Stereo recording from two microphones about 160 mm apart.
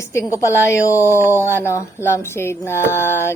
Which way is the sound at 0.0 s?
20° left (ahead or behind).